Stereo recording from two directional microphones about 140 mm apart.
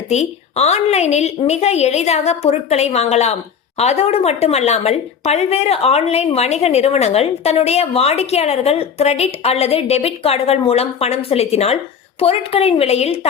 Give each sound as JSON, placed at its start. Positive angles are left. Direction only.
{"t": 0.1, "sound": "speech", "side_deg": 55}